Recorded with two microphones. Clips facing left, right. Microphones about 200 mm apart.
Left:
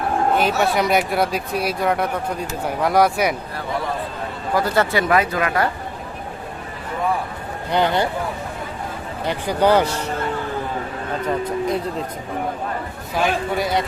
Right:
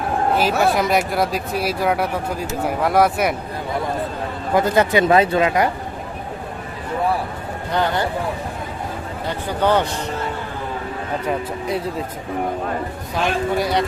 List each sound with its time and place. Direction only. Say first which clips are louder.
0.6 s speech: right 1 dB; centre (ahead or behind)
4.5 s speech: right 3 dB; 20° right (ahead or behind)
7.7 s speech: left 2 dB; 15° left (ahead or behind)
9.2 s speech: left 2 dB; 10° left (ahead or behind)
11.3 s speech: left 3 dB; 5° right (ahead or behind)
13.1 s speech: right 1 dB; centre (ahead or behind)